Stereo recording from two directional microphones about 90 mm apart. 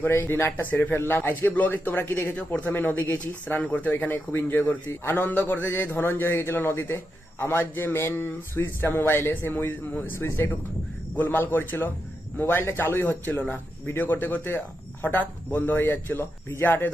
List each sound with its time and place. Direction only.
0.0 s a man's voice: 25° left (ahead or behind)